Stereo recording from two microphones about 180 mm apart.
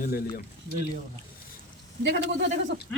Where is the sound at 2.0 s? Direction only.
70° right (ahead or behind).